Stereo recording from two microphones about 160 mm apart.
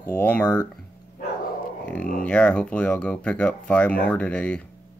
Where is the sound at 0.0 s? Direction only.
10° left (ahead or behind).